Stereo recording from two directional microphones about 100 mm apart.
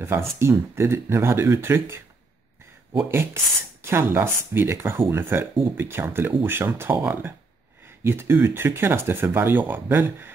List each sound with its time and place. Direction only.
0.0 s speech: 25° right (ahead or behind)
3.8 s speech: 25° right (ahead or behind)